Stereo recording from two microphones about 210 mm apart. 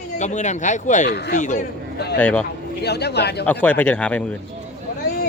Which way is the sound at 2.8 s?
50° left (ahead or behind).